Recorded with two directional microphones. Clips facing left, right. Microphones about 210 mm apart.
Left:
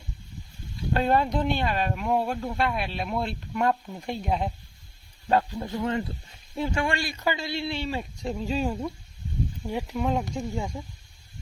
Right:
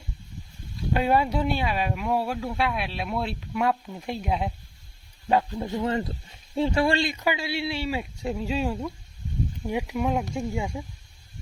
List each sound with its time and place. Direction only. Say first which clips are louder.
0.9 s speech: right 1 dB; 10° right (ahead or behind)
5.3 s a man's voice: right 1 dB; 15° right (ahead or behind)
5.8 s a man's voice: left 1 dB; 30° right (ahead or behind); by 10.8 s 10° right (ahead or behind)